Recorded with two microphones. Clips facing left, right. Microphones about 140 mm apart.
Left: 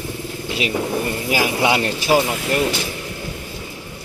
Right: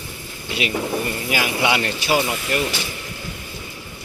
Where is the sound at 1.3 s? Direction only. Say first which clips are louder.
Left 3 dB; 35° left (ahead or behind).